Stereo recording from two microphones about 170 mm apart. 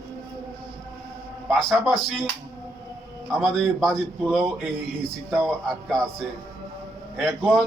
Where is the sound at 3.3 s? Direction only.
Centre (ahead or behind).